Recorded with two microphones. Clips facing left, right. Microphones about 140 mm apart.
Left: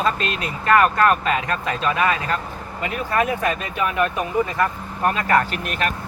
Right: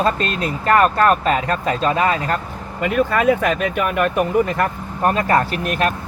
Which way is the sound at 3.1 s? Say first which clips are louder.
Right 4 dB; 80° right.